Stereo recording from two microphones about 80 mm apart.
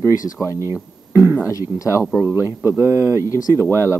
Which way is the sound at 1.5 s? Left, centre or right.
Left.